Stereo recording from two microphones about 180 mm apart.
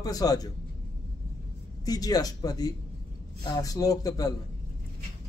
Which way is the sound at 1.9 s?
20° left (ahead or behind).